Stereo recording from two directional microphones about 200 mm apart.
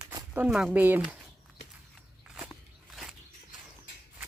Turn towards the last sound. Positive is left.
turn(degrees=0)  # may be behind; listen again after turning